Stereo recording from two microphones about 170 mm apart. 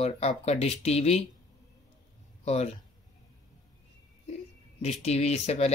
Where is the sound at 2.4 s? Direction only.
40° left (ahead or behind).